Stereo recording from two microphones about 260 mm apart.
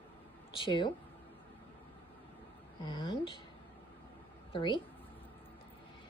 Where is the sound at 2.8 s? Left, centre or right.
Centre.